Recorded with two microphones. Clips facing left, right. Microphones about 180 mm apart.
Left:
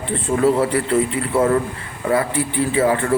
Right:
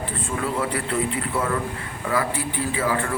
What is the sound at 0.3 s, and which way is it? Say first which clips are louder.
Speech: left 10 dB; 40° left (ahead or behind).